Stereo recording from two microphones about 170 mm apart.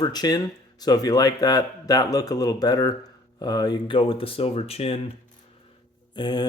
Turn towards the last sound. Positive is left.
turn(degrees=25)  # may be behind; listen again after turning